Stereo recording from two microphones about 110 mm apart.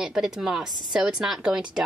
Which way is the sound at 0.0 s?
5° right (ahead or behind).